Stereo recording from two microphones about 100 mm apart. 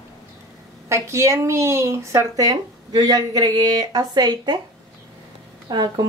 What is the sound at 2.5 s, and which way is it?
Speech, 40° right (ahead or behind).